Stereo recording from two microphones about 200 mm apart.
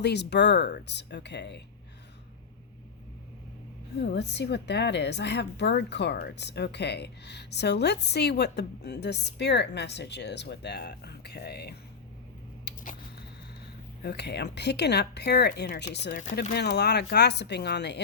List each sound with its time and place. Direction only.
0.0 s a woman's voice: 55° left (ahead or behind)
4.0 s a woman's voice: 55° left (ahead or behind)
12.7 s a sound: 55° left (ahead or behind)
14.0 s a woman's voice: 55° left (ahead or behind)